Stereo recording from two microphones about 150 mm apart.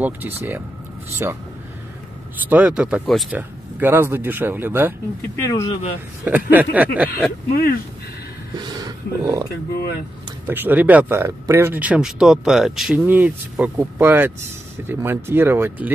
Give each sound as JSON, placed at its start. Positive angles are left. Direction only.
{"t": 0.0, "sound": "speech", "side_deg": -15}
{"t": 2.5, "sound": "speech", "side_deg": -10}
{"t": 3.3, "sound": "speech", "side_deg": -15}
{"t": 5.3, "sound": "speech", "side_deg": 20}
{"t": 6.2, "sound": "speech", "side_deg": -10}
{"t": 7.5, "sound": "speech", "side_deg": 85}
{"t": 8.6, "sound": "speech", "side_deg": -25}
{"t": 10.4, "sound": "speech", "side_deg": -15}